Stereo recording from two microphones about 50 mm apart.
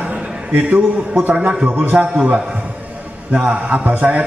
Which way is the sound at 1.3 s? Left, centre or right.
Right.